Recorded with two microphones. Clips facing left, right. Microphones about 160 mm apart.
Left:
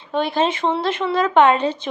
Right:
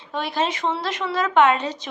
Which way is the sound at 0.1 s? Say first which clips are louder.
Left 5 dB; 25° left (ahead or behind).